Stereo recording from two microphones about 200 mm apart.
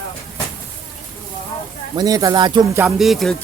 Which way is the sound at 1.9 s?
20° right (ahead or behind).